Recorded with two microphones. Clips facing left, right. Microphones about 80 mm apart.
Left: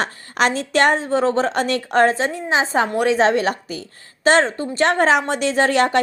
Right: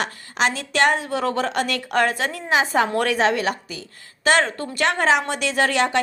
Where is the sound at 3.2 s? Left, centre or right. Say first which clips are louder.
Left 3 dB; left.